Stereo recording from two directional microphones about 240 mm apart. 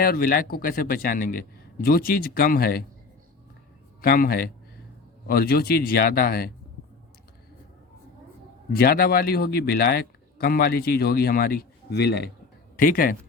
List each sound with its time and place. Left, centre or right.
0.0 s speech: left
4.0 s speech: left
8.7 s speech: left